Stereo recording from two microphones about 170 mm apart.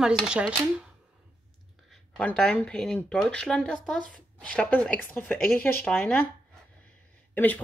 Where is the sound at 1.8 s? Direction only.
5° left (ahead or behind).